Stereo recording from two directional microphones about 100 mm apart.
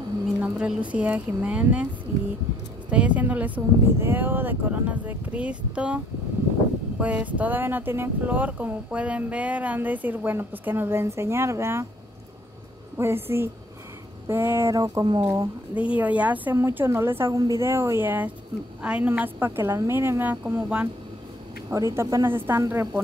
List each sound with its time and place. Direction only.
0.4 s speech: 10° right (ahead or behind)
2.9 s speech: 15° right (ahead or behind)
7.0 s speech: 15° right (ahead or behind)
12.9 s speech: 25° right (ahead or behind)
14.8 s speech: 40° right (ahead or behind)
15.7 s speech: 15° right (ahead or behind)
16.5 s speech: 25° right (ahead or behind)
21.6 s speech: 30° right (ahead or behind)